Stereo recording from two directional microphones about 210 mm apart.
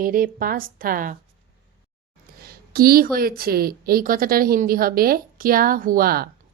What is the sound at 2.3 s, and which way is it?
A woman's voice, 45° right (ahead or behind).